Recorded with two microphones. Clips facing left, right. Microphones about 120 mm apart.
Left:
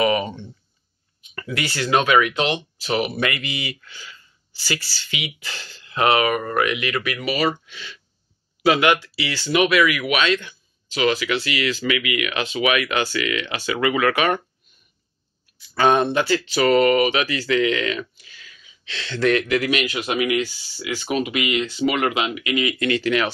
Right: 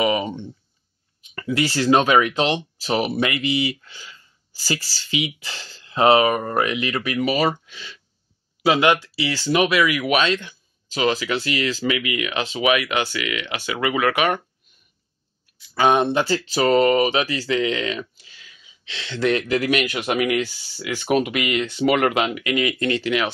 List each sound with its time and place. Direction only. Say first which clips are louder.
0.0 s speech: left 1 dB; 15° right (ahead or behind)
1.3 s speech: right 5 dB; 30° right (ahead or behind); by 14.4 s 15° right (ahead or behind)
15.5 s a sound: even; 15° right (ahead or behind)
16.1 s speech: even; 30° right (ahead or behind)
19.4 s speech: right 1 dB; 40° right (ahead or behind)
23.0 s speech: left 3 dB; 20° right (ahead or behind)